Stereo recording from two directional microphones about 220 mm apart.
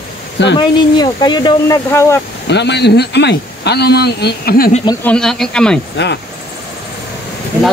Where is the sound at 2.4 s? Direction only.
50° left (ahead or behind).